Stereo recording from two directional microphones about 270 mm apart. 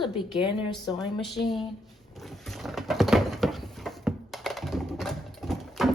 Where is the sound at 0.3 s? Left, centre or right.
Centre.